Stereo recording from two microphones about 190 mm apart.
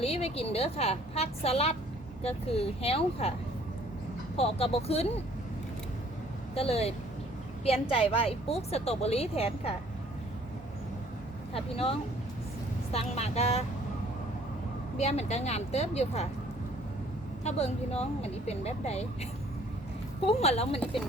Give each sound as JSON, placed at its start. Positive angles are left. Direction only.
{"t": 0.0, "sound": "a woman's voice", "side_deg": 30}
{"t": 4.4, "sound": "a woman's voice", "side_deg": 30}
{"t": 6.5, "sound": "a woman's voice", "side_deg": 30}
{"t": 11.5, "sound": "a woman's voice", "side_deg": 30}
{"t": 14.9, "sound": "a woman's voice", "side_deg": 35}
{"t": 17.4, "sound": "a woman's voice", "side_deg": 35}